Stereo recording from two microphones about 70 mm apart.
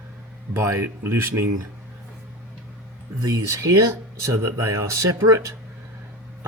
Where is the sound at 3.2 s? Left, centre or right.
Right.